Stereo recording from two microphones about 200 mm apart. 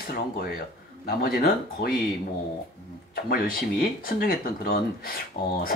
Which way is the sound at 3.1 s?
45° left (ahead or behind).